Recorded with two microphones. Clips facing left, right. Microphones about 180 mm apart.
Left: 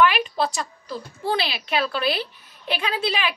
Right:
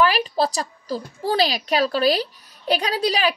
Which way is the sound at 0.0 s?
35° right (ahead or behind).